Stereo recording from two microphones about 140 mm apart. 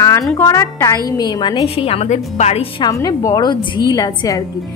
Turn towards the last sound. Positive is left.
turn(degrees=25)  # may be behind; listen again after turning